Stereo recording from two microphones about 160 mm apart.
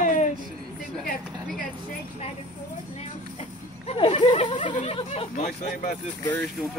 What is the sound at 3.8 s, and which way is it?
Speech, 35° left (ahead or behind).